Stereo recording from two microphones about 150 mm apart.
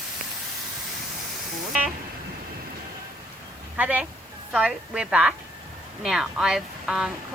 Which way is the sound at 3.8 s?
10° right (ahead or behind).